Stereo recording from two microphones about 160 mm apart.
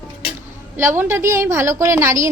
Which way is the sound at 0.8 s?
15° right (ahead or behind).